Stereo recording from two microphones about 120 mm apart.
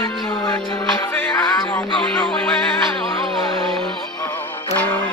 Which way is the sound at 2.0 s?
10° left (ahead or behind).